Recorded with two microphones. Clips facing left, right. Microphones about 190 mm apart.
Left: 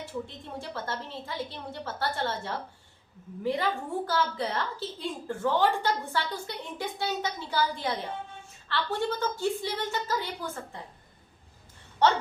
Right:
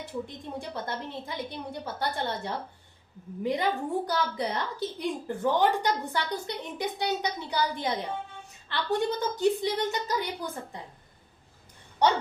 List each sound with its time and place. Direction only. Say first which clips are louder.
0.0 s a woman's voice: right 1 dB; 15° right (ahead or behind)
12.0 s a woman's voice: even; 15° right (ahead or behind)